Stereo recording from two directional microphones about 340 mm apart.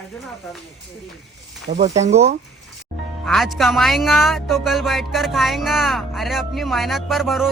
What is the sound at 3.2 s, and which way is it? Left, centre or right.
Speech, centre.